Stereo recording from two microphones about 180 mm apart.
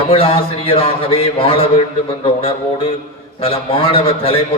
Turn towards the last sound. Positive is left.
turn(degrees=30)  # may be behind; listen again after turning